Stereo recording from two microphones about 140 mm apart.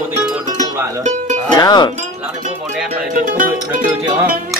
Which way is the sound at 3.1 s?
70° right (ahead or behind).